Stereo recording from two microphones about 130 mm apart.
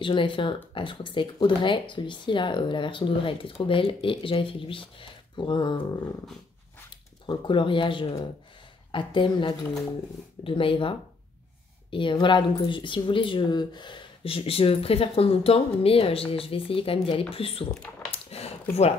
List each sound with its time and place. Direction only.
0.0 s speech: 40° left (ahead or behind)
7.2 s speech: 40° left (ahead or behind)
18.1 s a sound: 50° left (ahead or behind)